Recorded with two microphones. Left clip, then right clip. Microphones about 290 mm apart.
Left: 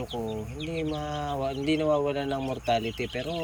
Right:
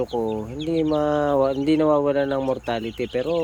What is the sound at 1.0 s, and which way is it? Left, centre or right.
Speech, centre.